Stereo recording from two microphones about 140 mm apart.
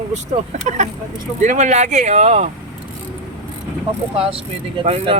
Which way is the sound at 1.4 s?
55° right (ahead or behind).